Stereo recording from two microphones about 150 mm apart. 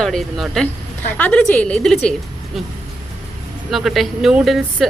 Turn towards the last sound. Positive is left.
turn(degrees=0)  # may be behind; listen again after turning